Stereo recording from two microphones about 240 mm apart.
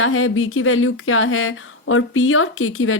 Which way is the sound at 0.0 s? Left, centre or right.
Left.